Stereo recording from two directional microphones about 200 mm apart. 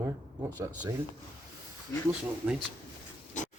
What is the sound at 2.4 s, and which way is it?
Speech, 10° right (ahead or behind).